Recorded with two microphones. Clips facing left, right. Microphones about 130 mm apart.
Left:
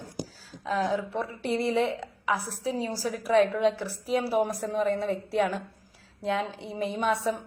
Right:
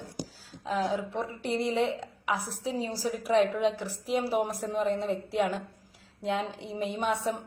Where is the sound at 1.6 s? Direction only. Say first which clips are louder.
Left 1 dB; 15° right (ahead or behind).